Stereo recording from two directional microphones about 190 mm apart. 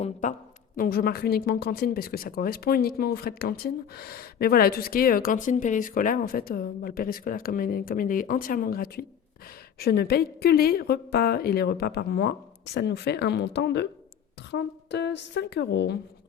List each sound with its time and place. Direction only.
0.0 s speech: 40° left (ahead or behind)
0.8 s a woman's voice: 50° left (ahead or behind)